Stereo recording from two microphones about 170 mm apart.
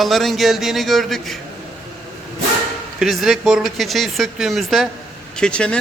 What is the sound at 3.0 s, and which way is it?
Speech, centre (ahead or behind).